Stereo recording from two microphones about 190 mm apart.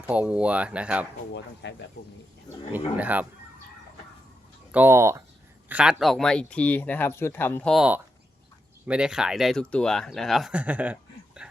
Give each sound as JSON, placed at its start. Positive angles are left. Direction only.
{"t": 0.1, "sound": "speech", "side_deg": -5}
{"t": 1.6, "sound": "speech", "side_deg": 65}
{"t": 2.7, "sound": "speech", "side_deg": -10}
{"t": 4.7, "sound": "speech", "side_deg": -10}
{"t": 11.4, "sound": "a sound", "side_deg": -5}